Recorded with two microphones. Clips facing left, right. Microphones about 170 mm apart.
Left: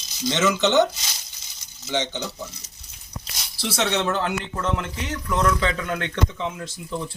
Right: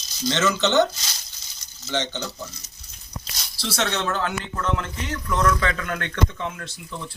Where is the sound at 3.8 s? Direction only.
10° left (ahead or behind).